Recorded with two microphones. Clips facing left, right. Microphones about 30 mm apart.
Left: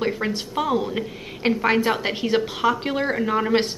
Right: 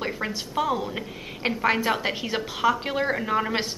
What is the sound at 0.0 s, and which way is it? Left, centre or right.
A woman's voice, centre.